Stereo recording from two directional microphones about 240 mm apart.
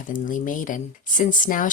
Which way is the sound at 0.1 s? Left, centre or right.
Left.